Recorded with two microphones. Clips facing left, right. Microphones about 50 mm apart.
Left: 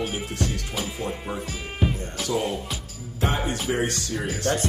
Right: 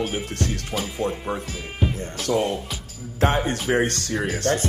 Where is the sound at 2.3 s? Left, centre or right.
Right.